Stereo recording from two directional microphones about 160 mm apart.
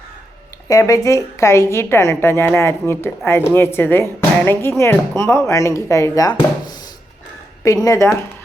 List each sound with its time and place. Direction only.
0.7 s a woman's voice: 20° left (ahead or behind)